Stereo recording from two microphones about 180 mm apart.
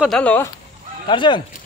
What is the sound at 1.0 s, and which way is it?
Speech, 25° left (ahead or behind).